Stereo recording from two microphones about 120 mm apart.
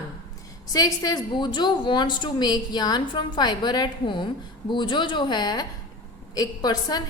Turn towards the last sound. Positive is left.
turn(degrees=35)  # may be behind; listen again after turning